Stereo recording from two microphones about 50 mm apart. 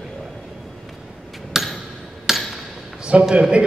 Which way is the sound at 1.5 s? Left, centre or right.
Centre.